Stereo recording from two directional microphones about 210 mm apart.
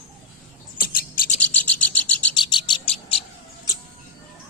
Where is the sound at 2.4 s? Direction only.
20° left (ahead or behind).